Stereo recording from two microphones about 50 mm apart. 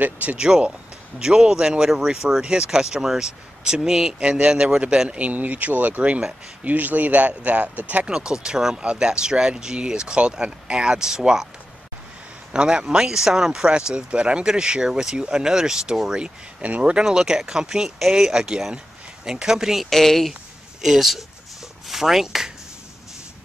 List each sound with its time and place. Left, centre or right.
0.0 s speech: right
0.4 s speech: centre
5.1 s speech: right
8.1 s speech: centre
12.5 s speech: centre
16.6 s speech: right
16.9 s speech: centre
19.9 s speech: centre